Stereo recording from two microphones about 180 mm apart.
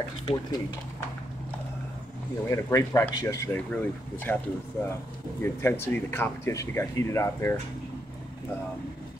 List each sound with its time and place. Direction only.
0.2 s speech: 30° left (ahead or behind)
2.4 s speech: 15° left (ahead or behind)